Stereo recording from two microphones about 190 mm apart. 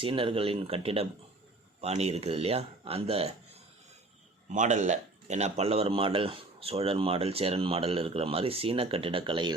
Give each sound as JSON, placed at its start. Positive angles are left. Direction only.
{"t": 0.0, "sound": "speech", "side_deg": -25}
{"t": 4.4, "sound": "speech", "side_deg": -40}